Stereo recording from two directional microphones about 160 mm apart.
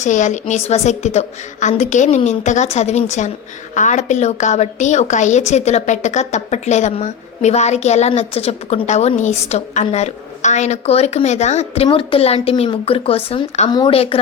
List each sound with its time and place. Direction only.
0.0 s a woman's voice: 50° left (ahead or behind)